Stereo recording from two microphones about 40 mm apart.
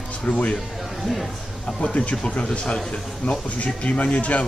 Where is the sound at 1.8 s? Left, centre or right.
Left.